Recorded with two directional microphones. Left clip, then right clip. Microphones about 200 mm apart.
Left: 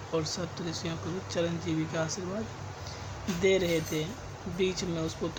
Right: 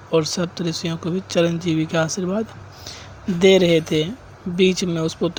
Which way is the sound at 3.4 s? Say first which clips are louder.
Right 12 dB; 45° right (ahead or behind).